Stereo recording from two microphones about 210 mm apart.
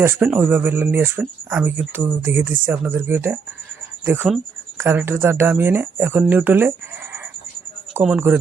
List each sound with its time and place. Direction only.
0.0 s speech: 10° right (ahead or behind)